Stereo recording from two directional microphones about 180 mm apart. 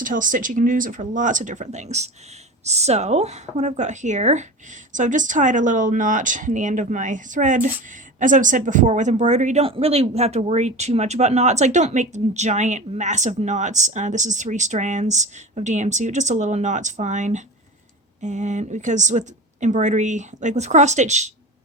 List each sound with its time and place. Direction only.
0.0 s speech: 50° right (ahead or behind)